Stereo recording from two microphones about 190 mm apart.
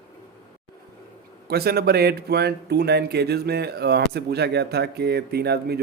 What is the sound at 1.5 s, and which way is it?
Speech, 55° right (ahead or behind).